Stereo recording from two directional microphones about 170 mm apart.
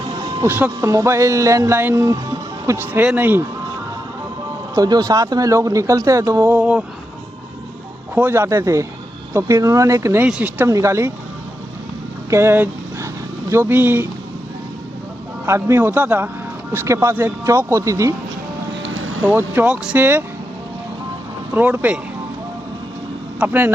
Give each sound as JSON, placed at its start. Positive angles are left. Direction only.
{"t": 0.0, "sound": "music", "side_deg": -25}
{"t": 0.4, "sound": "speech", "side_deg": -10}
{"t": 4.7, "sound": "speech", "side_deg": -20}
{"t": 8.1, "sound": "speech", "side_deg": -15}
{"t": 12.3, "sound": "speech", "side_deg": -15}
{"t": 15.4, "sound": "speech", "side_deg": -15}
{"t": 19.2, "sound": "speech", "side_deg": -10}
{"t": 21.5, "sound": "speech", "side_deg": -10}
{"t": 23.4, "sound": "speech", "side_deg": -10}